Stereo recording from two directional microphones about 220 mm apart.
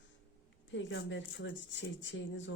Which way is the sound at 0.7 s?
55° left (ahead or behind).